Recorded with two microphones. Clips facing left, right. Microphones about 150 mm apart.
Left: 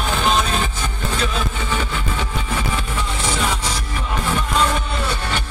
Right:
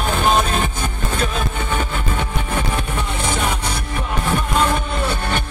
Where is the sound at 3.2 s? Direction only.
60° right (ahead or behind).